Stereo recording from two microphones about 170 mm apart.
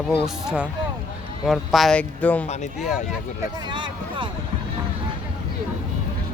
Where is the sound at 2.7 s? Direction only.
Centre (ahead or behind).